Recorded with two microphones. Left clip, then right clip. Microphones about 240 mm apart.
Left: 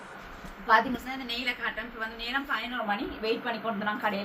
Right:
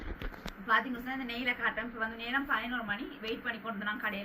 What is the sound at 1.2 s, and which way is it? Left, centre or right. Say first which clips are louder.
A woman's voice: left 1 dB; left.